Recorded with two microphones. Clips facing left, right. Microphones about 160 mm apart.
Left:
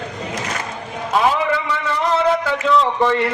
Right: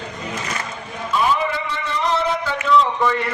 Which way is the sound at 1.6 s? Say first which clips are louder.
Left 3 dB; 60° left (ahead or behind).